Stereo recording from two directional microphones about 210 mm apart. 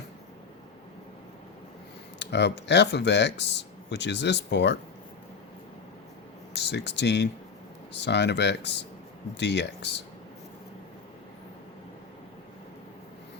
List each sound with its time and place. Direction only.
2.1 s speech: 55° left (ahead or behind)
6.5 s speech: 55° left (ahead or behind)